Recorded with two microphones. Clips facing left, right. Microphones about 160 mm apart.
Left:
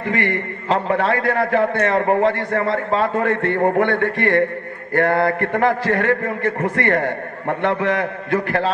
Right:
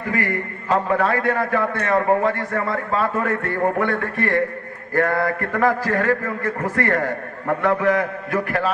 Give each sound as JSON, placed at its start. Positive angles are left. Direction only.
{"t": 0.0, "sound": "a man's voice", "side_deg": 25}